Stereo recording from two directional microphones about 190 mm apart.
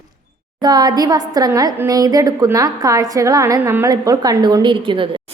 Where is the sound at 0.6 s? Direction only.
20° right (ahead or behind).